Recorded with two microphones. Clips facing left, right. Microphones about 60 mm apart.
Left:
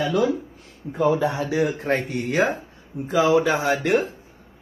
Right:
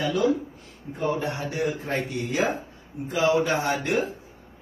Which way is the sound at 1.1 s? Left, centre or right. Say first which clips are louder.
Left 6 dB; left.